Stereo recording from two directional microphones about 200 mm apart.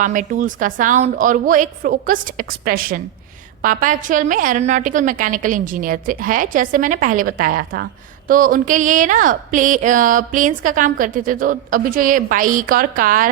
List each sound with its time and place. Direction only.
0.0 s speech: 40° right (ahead or behind)